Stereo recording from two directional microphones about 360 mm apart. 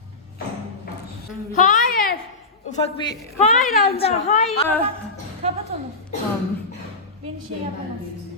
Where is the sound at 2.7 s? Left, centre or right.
Centre.